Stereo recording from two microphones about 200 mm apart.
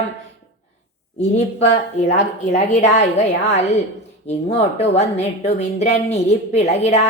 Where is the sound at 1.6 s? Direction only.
35° left (ahead or behind).